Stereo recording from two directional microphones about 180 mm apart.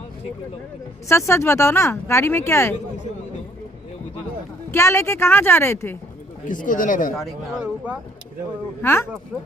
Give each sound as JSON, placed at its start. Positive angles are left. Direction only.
{"t": 1.0, "sound": "speech", "side_deg": 15}
{"t": 4.7, "sound": "speech", "side_deg": 15}
{"t": 6.4, "sound": "speech", "side_deg": 45}
{"t": 7.2, "sound": "speech", "side_deg": 0}
{"t": 8.8, "sound": "speech", "side_deg": 15}